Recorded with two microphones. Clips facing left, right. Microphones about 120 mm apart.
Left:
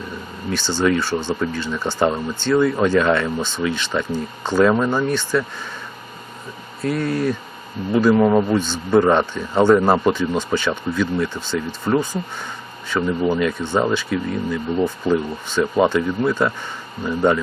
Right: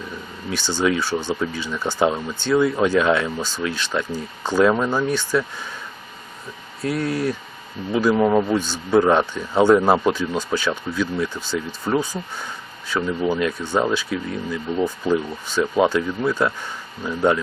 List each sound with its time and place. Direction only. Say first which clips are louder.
0.5 s speech: left 2 dB; 10° right (ahead or behind)
6.8 s speech: left 2 dB; 5° right (ahead or behind)
8.5 s speech: left 1 dB; 10° right (ahead or behind)